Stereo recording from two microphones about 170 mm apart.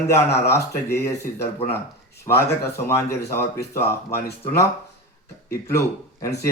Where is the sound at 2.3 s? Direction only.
15° left (ahead or behind).